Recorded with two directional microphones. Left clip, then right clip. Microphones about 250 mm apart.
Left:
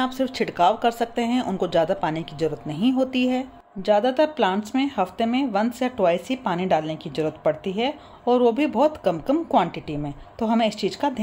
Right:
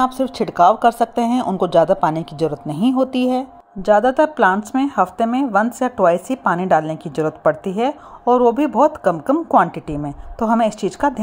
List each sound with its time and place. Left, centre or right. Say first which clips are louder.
0.0 s speech: right 6 dB; right